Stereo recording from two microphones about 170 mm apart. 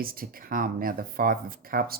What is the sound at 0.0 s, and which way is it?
Speech, 60° right (ahead or behind).